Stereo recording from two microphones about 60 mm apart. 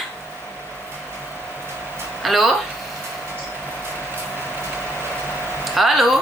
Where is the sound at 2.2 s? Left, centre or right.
Centre.